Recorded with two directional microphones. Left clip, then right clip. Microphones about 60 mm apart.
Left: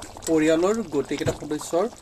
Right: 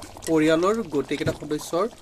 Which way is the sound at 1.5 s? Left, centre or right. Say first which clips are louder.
Left 1 dB; right.